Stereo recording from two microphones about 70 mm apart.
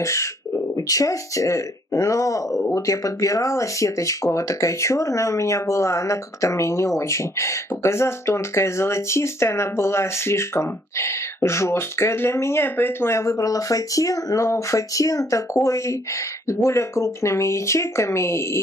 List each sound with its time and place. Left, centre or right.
0.0 s speech: left